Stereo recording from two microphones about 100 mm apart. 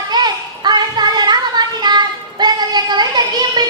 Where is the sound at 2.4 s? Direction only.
45° right (ahead or behind).